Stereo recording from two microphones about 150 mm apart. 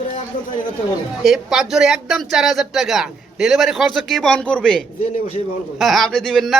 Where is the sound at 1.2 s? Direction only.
5° right (ahead or behind).